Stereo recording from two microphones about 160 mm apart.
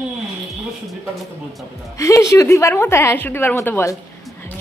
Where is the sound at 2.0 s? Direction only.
20° left (ahead or behind).